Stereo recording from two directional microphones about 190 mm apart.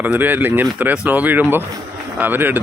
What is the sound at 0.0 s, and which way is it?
Speech, 10° right (ahead or behind).